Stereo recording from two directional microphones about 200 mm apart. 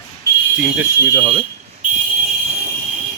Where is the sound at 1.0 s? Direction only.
20° right (ahead or behind).